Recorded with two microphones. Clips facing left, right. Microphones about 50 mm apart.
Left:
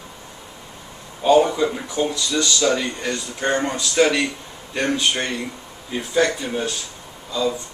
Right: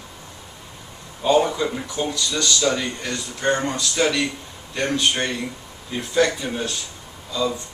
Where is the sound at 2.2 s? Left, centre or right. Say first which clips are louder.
Left 2 dB; centre.